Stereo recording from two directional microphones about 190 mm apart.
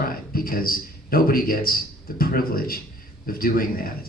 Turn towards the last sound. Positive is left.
turn(degrees=50)  # may be behind; listen again after turning